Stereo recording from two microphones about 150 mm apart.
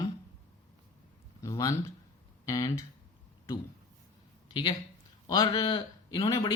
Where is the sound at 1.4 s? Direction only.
20° left (ahead or behind).